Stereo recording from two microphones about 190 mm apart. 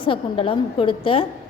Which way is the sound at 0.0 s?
30° left (ahead or behind).